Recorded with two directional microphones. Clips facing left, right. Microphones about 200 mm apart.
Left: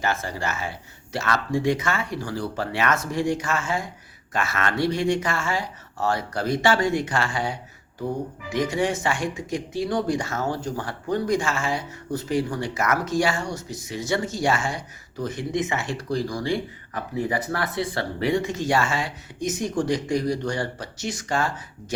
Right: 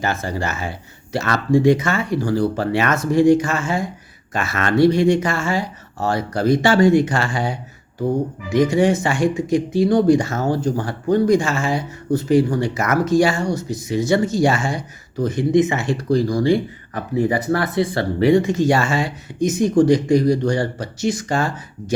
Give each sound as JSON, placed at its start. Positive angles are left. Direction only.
{"t": 0.0, "sound": "speech", "side_deg": -40}
{"t": 8.7, "sound": "speech", "side_deg": -35}